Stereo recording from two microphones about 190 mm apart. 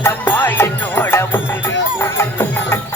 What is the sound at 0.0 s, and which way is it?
Music, 10° left (ahead or behind).